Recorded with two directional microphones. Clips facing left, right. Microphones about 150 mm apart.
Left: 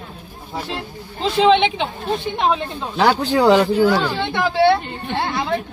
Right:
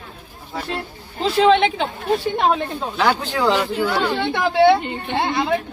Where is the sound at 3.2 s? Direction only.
40° left (ahead or behind).